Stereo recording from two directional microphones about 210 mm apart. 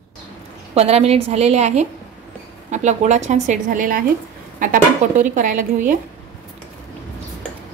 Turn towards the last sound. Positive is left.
turn(degrees=-40)  # may be behind; listen again after turning